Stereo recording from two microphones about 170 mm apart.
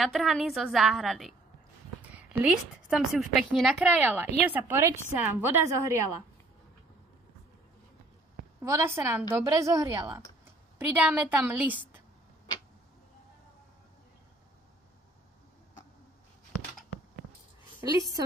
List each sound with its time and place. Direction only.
0.0 s a woman's voice: centre (ahead or behind); by 6.2 s 15° right (ahead or behind)
8.6 s a woman's voice: 15° right (ahead or behind)
17.7 s a woman's voice: 20° right (ahead or behind)